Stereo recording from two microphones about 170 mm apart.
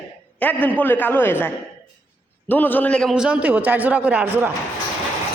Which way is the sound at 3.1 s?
5° right (ahead or behind).